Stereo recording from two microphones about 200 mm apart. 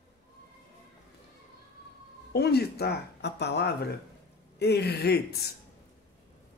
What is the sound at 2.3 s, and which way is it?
Speech, 55° left (ahead or behind).